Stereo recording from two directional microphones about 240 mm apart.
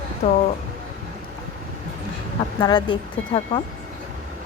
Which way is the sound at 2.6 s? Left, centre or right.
Centre.